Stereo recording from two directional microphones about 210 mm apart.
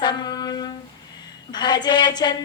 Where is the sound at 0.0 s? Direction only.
20° left (ahead or behind).